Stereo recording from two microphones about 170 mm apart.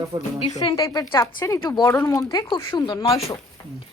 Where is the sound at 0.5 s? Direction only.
20° left (ahead or behind).